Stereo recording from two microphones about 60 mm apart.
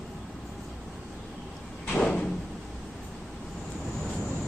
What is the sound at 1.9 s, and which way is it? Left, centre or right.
Door, centre.